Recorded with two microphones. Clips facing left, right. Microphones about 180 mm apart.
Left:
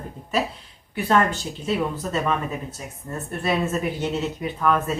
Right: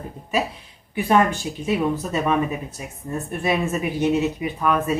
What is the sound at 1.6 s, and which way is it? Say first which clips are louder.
Speech: right 3 dB; 10° right (ahead or behind).